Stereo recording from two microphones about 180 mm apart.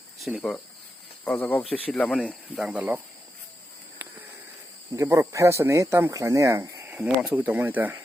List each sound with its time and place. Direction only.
0.2 s speech: centre (ahead or behind)
1.2 s speech: 10° left (ahead or behind)
2.6 s speech: 5° right (ahead or behind)
4.9 s speech: 15° right (ahead or behind)